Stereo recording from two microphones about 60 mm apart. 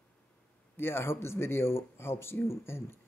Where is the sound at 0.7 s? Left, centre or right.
Left.